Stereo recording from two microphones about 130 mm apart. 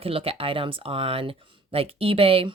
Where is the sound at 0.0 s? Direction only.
45° right (ahead or behind).